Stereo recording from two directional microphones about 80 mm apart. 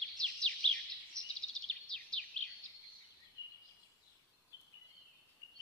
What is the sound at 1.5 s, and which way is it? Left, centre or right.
Bird vocalization, centre.